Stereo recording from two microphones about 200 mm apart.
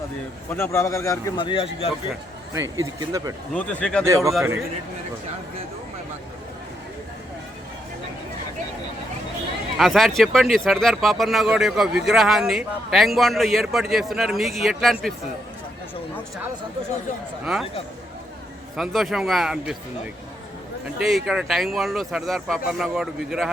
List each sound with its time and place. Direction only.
0.5 s speech: 15° left (ahead or behind)
2.5 s speech: 15° right (ahead or behind)
3.5 s speech: 5° left (ahead or behind)
4.0 s speech: 15° right (ahead or behind)
9.7 s speech: centre (ahead or behind)
17.4 s speech: 5° right (ahead or behind)
18.8 s speech: centre (ahead or behind)
21.2 s speech: centre (ahead or behind)